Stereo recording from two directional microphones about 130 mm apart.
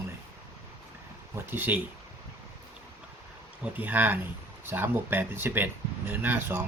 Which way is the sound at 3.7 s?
15° right (ahead or behind).